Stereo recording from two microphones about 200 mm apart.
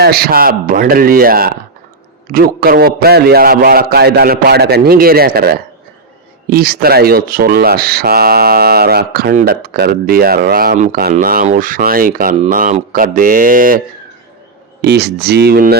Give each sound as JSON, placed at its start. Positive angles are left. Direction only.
{"t": 0.0, "sound": "speech", "side_deg": -50}
{"t": 14.8, "sound": "speech", "side_deg": -55}